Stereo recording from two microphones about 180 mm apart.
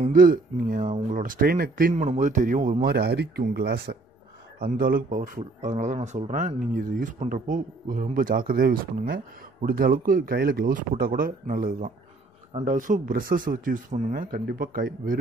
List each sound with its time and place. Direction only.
0.0 s speech: 50° right (ahead or behind)
4.6 s speech: 50° right (ahead or behind)